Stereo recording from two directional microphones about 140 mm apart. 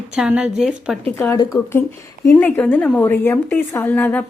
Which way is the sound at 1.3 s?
25° left (ahead or behind).